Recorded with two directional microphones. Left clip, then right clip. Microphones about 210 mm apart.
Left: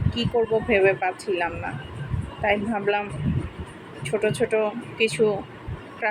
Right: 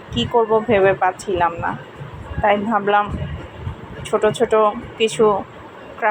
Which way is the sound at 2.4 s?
55° right (ahead or behind).